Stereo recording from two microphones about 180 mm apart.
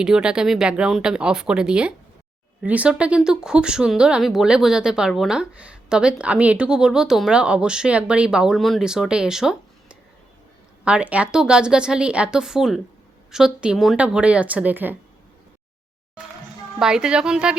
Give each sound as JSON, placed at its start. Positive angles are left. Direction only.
{"t": 0.0, "sound": "speech", "side_deg": -5}
{"t": 16.8, "sound": "speech", "side_deg": -5}